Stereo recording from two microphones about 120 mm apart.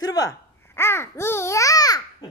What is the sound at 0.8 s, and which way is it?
Speech, 20° left (ahead or behind).